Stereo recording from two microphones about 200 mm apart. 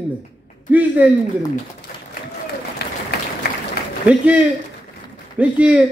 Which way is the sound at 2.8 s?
55° left (ahead or behind).